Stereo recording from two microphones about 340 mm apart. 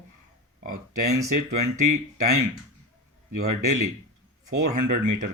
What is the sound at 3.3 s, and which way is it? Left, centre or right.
Speech, right.